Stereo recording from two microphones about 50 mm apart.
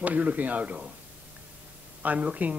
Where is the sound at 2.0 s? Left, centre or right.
Right.